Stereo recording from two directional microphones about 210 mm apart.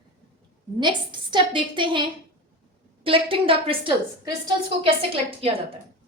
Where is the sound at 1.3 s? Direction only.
25° right (ahead or behind).